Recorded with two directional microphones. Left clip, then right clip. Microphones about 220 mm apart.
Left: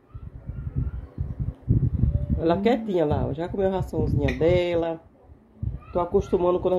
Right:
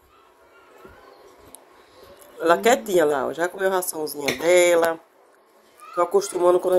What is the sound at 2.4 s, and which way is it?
Speech, 25° right (ahead or behind).